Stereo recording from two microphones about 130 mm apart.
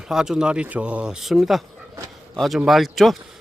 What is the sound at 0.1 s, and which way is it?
Speech, 5° right (ahead or behind).